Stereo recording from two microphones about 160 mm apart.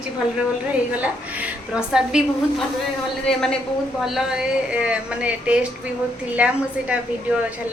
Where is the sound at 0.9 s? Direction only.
10° right (ahead or behind).